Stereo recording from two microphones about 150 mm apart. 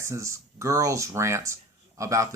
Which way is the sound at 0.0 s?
20° right (ahead or behind).